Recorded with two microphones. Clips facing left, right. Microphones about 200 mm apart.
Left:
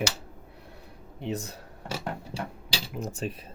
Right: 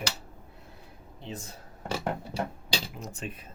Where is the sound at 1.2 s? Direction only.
75° left (ahead or behind).